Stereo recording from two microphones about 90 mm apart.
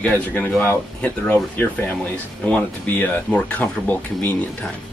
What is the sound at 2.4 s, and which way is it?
Speech, 15° left (ahead or behind).